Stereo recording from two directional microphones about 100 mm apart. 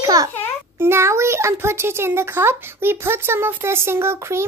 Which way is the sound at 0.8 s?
25° right (ahead or behind).